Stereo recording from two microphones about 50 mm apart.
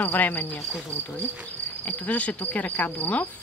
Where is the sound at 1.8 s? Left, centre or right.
Left.